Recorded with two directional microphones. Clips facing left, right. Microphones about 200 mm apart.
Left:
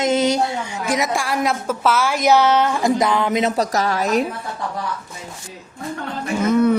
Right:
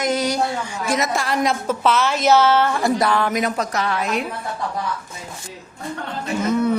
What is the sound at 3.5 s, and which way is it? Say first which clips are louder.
Speech: left 3 dB; 40° left (ahead or behind).